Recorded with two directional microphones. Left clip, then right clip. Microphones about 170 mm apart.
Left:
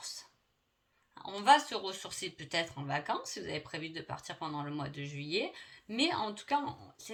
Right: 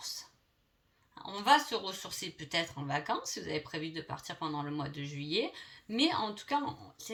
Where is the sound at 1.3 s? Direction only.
35° left (ahead or behind).